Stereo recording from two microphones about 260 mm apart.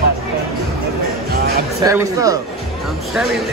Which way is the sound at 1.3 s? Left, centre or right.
Right.